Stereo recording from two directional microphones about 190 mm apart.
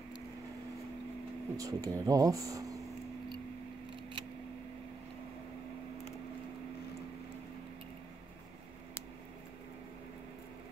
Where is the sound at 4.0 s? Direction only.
25° right (ahead or behind).